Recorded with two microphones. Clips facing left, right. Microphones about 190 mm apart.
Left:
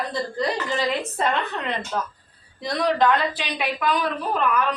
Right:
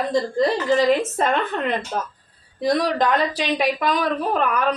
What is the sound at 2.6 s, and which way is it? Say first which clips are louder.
Speech: right 1 dB; 40° right (ahead or behind).